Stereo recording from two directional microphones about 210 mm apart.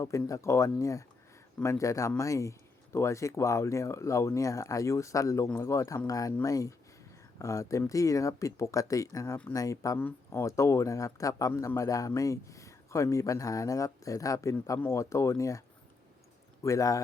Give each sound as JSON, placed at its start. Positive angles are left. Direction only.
{"t": 0.0, "sound": "speech", "side_deg": 15}
{"t": 16.6, "sound": "speech", "side_deg": 15}